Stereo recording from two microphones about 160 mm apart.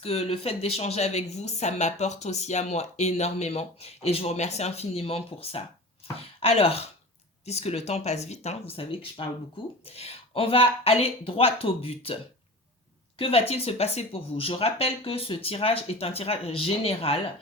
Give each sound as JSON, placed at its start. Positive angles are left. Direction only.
{"t": 0.0, "sound": "a woman's voice", "side_deg": 40}
{"t": 13.1, "sound": "a woman's voice", "side_deg": 35}